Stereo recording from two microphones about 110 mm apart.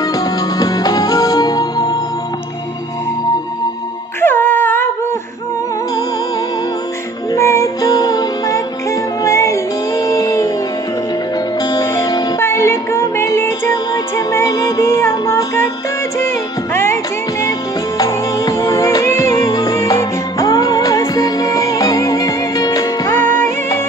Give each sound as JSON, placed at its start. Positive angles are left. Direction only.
{"t": 0.0, "sound": "music", "side_deg": 35}
{"t": 4.2, "sound": "music", "side_deg": 20}
{"t": 7.3, "sound": "music", "side_deg": 25}
{"t": 11.6, "sound": "music", "side_deg": 40}
{"t": 12.4, "sound": "music", "side_deg": 25}
{"t": 16.7, "sound": "music", "side_deg": 25}
{"t": 23.0, "sound": "music", "side_deg": 20}